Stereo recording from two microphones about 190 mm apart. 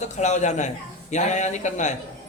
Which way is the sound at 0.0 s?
40° left (ahead or behind).